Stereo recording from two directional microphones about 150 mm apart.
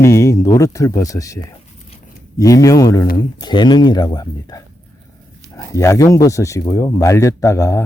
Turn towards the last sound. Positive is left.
turn(degrees=20)  # may be behind; listen again after turning